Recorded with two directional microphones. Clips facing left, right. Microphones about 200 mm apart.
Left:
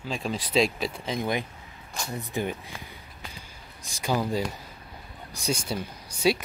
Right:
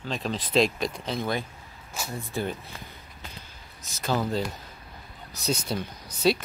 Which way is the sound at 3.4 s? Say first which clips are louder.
Left 2 dB; 15° left (ahead or behind).